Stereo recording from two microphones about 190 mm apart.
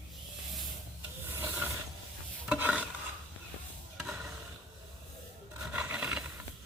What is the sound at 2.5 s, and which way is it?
Stir, 5° right (ahead or behind).